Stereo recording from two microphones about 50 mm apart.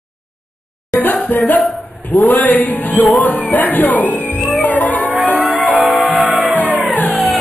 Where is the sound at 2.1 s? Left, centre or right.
Left.